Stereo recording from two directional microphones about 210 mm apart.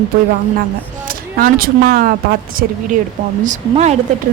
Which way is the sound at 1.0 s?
40° right (ahead or behind).